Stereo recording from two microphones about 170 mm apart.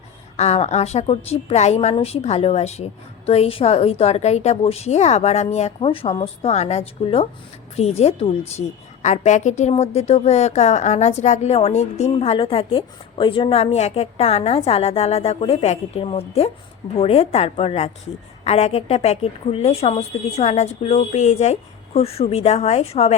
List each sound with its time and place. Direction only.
0.3 s a woman's voice: 40° left (ahead or behind)